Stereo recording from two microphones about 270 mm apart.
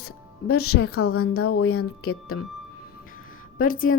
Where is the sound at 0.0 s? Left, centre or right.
Left.